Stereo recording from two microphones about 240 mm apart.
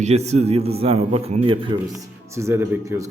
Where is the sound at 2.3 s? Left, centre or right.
Centre.